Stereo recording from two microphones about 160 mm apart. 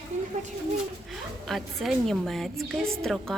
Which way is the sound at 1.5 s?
Centre (ahead or behind).